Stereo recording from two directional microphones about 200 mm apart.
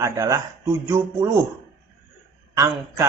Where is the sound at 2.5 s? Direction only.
15° right (ahead or behind).